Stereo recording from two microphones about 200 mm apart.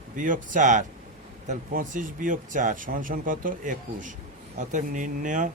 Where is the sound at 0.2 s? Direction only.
40° right (ahead or behind).